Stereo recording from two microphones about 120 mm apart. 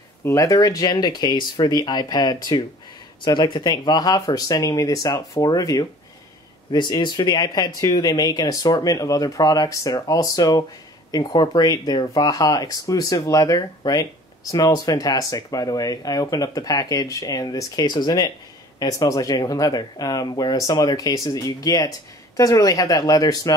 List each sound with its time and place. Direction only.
0.2 s speech: 25° left (ahead or behind)